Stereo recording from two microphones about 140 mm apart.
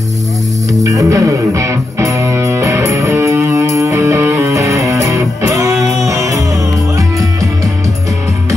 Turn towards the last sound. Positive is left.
turn(degrees=-25)  # may be behind; listen again after turning